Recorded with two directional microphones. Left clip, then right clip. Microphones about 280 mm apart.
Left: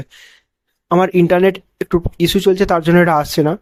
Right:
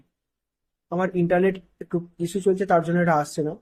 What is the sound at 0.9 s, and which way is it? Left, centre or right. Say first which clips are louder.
Speech: left 10 dB; left.